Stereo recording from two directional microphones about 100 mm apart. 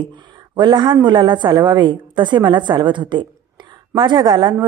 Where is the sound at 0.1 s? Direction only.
50° right (ahead or behind).